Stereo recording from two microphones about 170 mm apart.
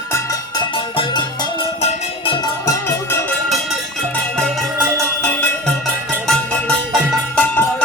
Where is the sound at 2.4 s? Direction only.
15° left (ahead or behind).